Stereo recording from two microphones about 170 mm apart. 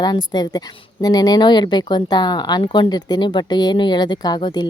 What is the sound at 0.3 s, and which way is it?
Speech, 25° left (ahead or behind).